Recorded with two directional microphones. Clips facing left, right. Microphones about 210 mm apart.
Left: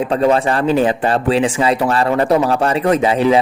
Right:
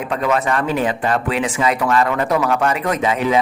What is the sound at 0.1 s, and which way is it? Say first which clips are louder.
Speech: left 3 dB; 30° left (ahead or behind).